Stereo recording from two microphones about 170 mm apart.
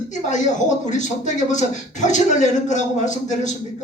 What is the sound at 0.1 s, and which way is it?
Speech, 45° left (ahead or behind).